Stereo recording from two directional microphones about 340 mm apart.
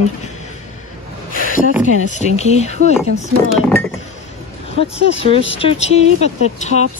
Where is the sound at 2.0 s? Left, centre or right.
Centre.